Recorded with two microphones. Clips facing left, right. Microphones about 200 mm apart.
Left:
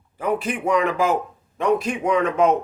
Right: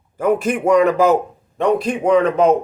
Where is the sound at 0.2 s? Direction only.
45° right (ahead or behind).